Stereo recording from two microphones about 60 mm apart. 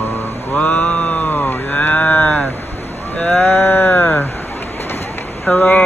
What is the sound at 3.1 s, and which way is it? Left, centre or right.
Speech, left.